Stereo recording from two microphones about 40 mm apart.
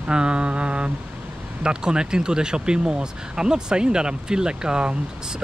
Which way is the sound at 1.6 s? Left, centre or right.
Right.